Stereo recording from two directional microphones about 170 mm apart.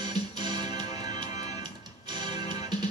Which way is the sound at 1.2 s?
40° left (ahead or behind).